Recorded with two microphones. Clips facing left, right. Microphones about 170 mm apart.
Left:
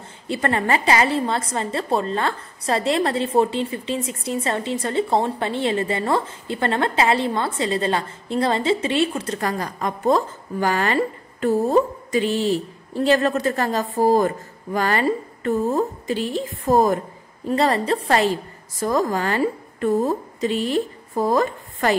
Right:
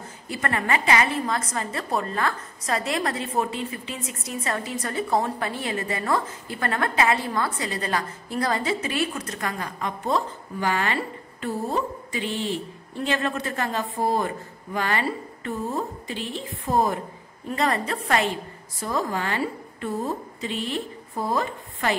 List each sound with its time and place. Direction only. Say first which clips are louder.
0.3 s a woman's voice: left 5 dB; 30° left (ahead or behind)
17.5 s a woman's voice: left 6 dB; 35° left (ahead or behind)
18.8 s a woman's voice: left 6 dB; 45° left (ahead or behind)